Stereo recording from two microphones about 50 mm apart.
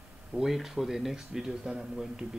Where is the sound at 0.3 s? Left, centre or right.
Centre.